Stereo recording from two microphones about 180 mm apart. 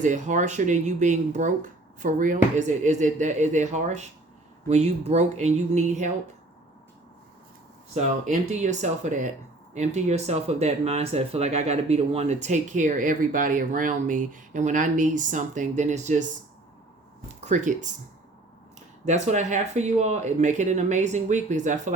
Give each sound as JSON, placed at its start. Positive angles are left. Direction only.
{"t": 0.0, "sound": "speech", "side_deg": -45}
{"t": 7.9, "sound": "speech", "side_deg": -40}
{"t": 17.4, "sound": "speech", "side_deg": -45}
{"t": 19.0, "sound": "speech", "side_deg": -40}